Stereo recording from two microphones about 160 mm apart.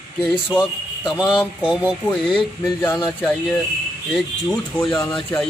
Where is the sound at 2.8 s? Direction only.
25° left (ahead or behind).